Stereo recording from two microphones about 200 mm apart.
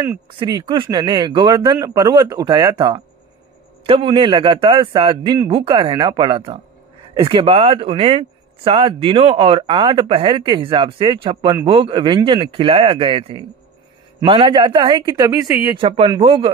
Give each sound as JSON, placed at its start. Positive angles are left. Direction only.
{"t": 0.3, "sound": "speech", "side_deg": -20}